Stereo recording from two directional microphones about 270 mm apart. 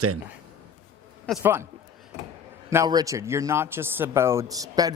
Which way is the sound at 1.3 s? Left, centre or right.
Centre.